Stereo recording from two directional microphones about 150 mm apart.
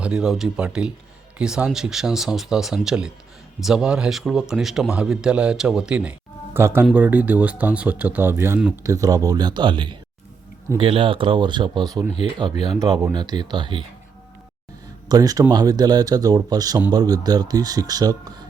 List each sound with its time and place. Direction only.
0.0 s a man's voice: 5° right (ahead or behind); by 13.8 s 30° right (ahead or behind)
15.1 s speech: 25° right (ahead or behind)